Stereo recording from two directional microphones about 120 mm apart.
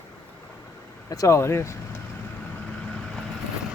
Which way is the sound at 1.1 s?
30° left (ahead or behind).